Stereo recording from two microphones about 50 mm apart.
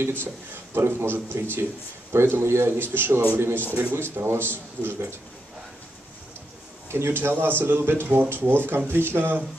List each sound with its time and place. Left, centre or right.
0.0 s speech: right
6.9 s speech: right